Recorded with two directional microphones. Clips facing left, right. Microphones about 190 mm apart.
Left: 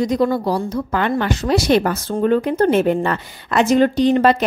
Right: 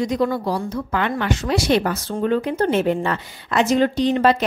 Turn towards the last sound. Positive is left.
turn(degrees=50)  # may be behind; listen again after turning